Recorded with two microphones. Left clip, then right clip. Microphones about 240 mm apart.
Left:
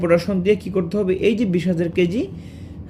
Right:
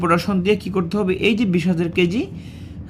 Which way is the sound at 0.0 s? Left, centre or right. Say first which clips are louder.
Left 1 dB; right.